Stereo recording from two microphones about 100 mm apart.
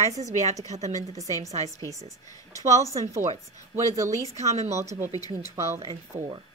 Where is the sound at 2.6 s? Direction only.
35° right (ahead or behind).